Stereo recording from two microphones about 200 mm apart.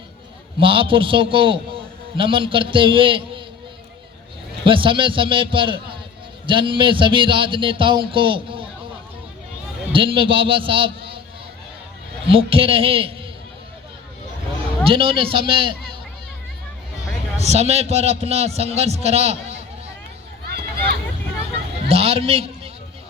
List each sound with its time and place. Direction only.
0.6 s speech: 25° right (ahead or behind)
4.6 s speech: 25° right (ahead or behind)
9.9 s speech: 25° right (ahead or behind)
12.3 s speech: 25° right (ahead or behind)
14.8 s speech: 25° right (ahead or behind)
17.4 s a man's voice: 30° right (ahead or behind)
21.8 s a man's voice: 30° right (ahead or behind)